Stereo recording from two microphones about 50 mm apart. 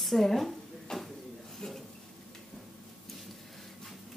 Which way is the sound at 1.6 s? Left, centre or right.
Centre.